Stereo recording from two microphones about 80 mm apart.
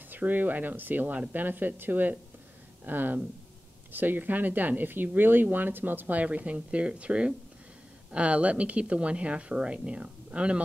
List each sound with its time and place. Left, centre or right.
0.1 s speech: right